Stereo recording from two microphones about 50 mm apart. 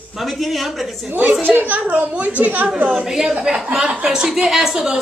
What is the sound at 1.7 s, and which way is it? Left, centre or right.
A woman's voice, right.